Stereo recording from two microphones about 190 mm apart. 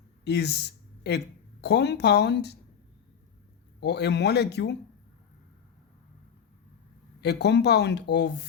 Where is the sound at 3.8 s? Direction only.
60° left (ahead or behind).